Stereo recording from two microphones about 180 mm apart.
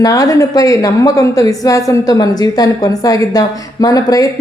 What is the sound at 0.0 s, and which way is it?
A woman's voice, 20° left (ahead or behind).